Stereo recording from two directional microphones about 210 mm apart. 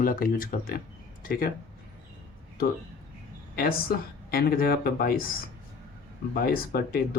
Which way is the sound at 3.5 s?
45° left (ahead or behind).